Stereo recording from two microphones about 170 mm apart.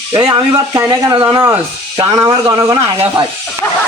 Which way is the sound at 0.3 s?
25° right (ahead or behind).